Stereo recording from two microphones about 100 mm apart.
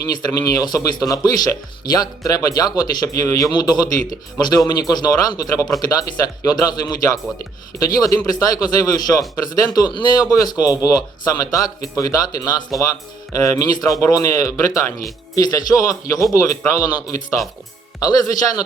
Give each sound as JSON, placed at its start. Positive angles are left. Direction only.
{"t": 0.0, "sound": "speech", "side_deg": 40}